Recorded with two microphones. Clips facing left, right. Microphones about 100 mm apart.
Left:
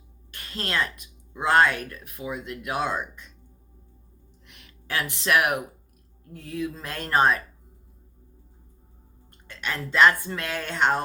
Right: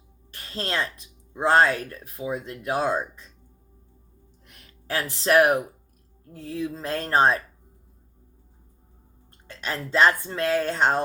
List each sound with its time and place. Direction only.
0.3 s speech: 30° right (ahead or behind)
4.4 s speech: 40° right (ahead or behind)
9.5 s speech: 35° right (ahead or behind)